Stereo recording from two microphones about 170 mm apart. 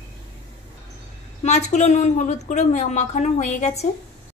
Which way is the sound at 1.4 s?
45° left (ahead or behind).